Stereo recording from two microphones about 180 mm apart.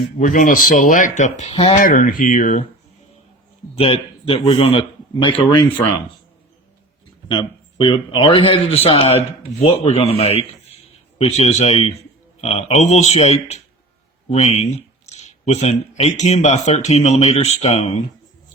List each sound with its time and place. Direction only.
0.2 s speech: 45° left (ahead or behind)
1.8 s speech: 50° left (ahead or behind)
3.8 s speech: 30° left (ahead or behind)
7.3 s speech: 25° left (ahead or behind)